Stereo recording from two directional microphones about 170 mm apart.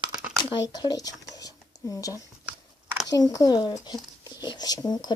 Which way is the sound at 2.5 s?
5° right (ahead or behind).